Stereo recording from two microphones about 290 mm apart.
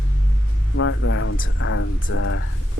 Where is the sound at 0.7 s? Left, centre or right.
Left.